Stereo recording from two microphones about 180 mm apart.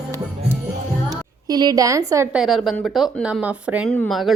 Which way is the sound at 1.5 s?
20° right (ahead or behind).